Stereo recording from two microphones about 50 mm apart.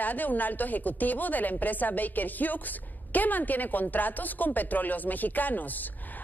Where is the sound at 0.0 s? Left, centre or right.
Left.